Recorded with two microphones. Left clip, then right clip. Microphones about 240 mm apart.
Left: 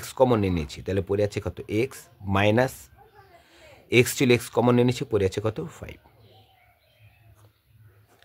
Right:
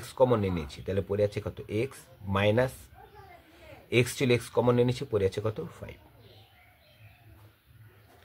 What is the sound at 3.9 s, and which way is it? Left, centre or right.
Speech, left.